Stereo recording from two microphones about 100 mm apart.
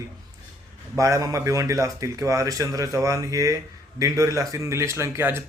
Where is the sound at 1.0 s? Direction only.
35° right (ahead or behind).